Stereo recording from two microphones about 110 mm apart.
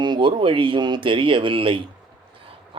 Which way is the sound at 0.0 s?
45° right (ahead or behind).